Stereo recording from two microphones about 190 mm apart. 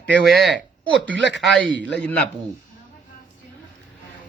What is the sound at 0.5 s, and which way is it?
Speech, 75° right (ahead or behind).